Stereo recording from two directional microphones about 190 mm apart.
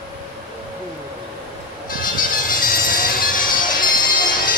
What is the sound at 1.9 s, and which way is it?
Music, 45° left (ahead or behind).